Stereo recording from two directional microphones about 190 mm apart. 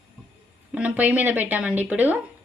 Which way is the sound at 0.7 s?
5° right (ahead or behind).